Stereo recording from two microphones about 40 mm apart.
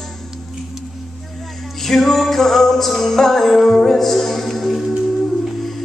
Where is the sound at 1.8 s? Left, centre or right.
Centre.